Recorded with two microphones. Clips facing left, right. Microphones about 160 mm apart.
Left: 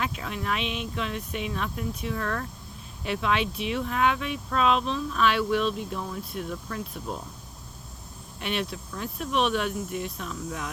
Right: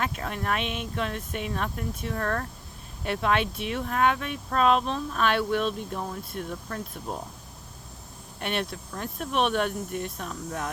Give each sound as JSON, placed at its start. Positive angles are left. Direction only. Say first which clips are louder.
{"t": 0.0, "sound": "speech", "louder": "right 1 dB", "side_deg": -50}
{"t": 8.4, "sound": "speech", "louder": "even", "side_deg": -50}